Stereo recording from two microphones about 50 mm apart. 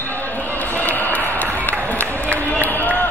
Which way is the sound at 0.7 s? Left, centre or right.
Left.